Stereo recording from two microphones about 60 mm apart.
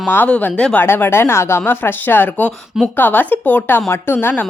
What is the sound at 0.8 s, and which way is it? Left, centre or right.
Speech, left.